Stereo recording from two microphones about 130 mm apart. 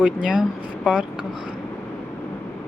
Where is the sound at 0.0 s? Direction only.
10° right (ahead or behind).